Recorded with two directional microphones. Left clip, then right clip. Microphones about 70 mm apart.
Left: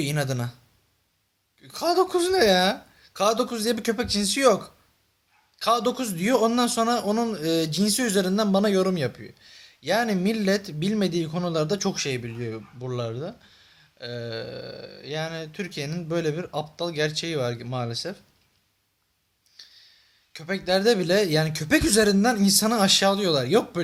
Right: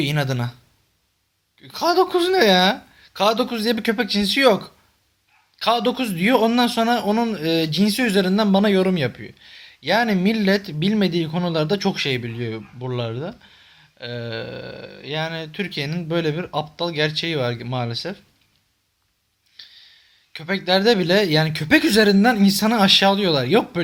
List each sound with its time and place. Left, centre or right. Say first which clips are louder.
0.0 s speech: right 5 dB; left
1.6 s speech: right 4 dB; left
19.5 s speech: right 6 dB; left